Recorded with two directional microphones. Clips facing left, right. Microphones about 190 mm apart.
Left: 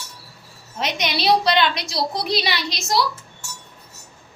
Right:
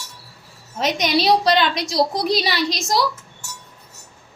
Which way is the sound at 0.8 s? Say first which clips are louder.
Right 5 dB; 45° right (ahead or behind).